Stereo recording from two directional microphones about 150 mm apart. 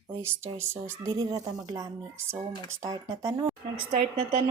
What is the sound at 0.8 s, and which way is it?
Speech, 20° right (ahead or behind).